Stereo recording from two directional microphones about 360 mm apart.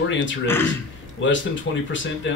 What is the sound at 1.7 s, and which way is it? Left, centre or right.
Speech, left.